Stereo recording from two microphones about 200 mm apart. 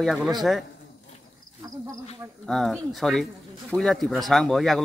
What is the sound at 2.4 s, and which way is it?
Speech, centre (ahead or behind).